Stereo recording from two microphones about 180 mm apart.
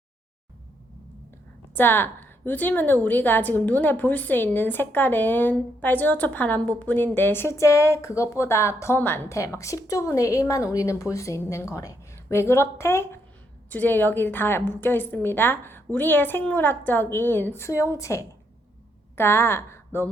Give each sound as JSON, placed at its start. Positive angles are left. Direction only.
{"t": 1.7, "sound": "a woman's voice", "side_deg": 10}